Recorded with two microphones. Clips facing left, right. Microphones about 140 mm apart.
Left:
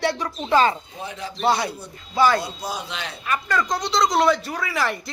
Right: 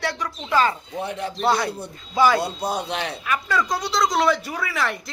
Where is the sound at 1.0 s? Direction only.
60° right (ahead or behind).